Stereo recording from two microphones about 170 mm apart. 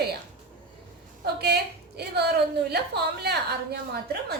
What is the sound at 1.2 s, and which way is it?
A woman's voice, 75° right (ahead or behind).